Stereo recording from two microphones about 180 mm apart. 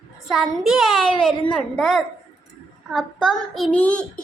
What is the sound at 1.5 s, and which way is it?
A child's voice, 5° left (ahead or behind).